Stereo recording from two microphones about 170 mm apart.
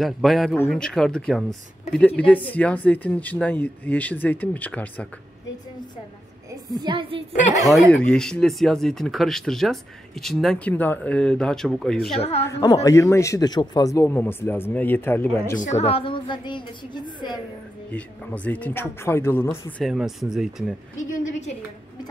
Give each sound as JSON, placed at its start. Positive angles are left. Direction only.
{"t": 0.0, "sound": "speech", "side_deg": 0}
{"t": 6.7, "sound": "a woman's voice", "side_deg": -25}
{"t": 7.7, "sound": "speech", "side_deg": 5}
{"t": 12.2, "sound": "a woman's voice", "side_deg": 35}
{"t": 12.4, "sound": "a woman's voice", "side_deg": 20}
{"t": 15.5, "sound": "a woman's voice", "side_deg": 45}
{"t": 17.9, "sound": "speech", "side_deg": 10}
{"t": 19.8, "sound": "speech", "side_deg": 0}
{"t": 21.1, "sound": "a woman's voice", "side_deg": 45}